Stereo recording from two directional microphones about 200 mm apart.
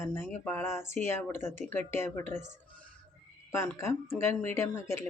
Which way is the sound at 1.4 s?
35° right (ahead or behind).